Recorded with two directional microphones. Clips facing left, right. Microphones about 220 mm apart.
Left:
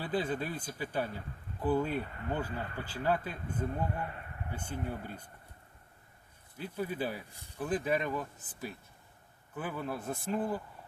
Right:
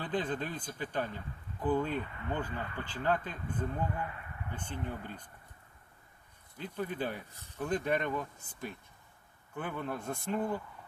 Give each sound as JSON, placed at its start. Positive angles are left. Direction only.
{"t": 0.0, "sound": "speech", "side_deg": 10}
{"t": 3.9, "sound": "a sound", "side_deg": 40}
{"t": 4.5, "sound": "speech", "side_deg": 10}
{"t": 6.6, "sound": "speech", "side_deg": 10}